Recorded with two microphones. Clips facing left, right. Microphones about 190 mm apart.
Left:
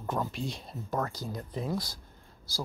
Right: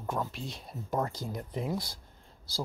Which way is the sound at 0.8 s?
20° right (ahead or behind).